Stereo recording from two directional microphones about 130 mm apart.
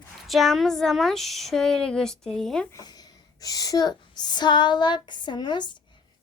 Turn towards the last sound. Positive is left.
turn(degrees=35)  # may be behind; listen again after turning